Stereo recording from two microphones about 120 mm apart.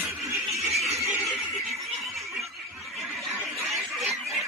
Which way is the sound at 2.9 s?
Centre (ahead or behind).